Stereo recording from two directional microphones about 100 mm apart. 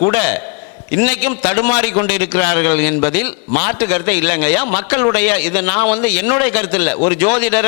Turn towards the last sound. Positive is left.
turn(degrees=20)  # may be behind; listen again after turning